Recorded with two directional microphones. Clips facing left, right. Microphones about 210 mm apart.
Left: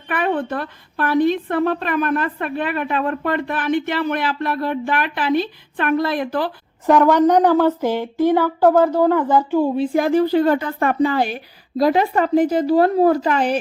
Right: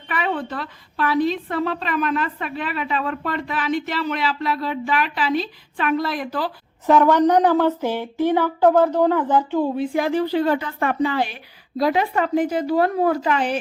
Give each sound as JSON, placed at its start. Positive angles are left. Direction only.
{"t": 0.1, "sound": "a woman's voice", "side_deg": 50}
{"t": 7.3, "sound": "a sound", "side_deg": 15}
{"t": 9.7, "sound": "a woman's voice", "side_deg": 30}
{"t": 10.0, "sound": "a woman's voice", "side_deg": 45}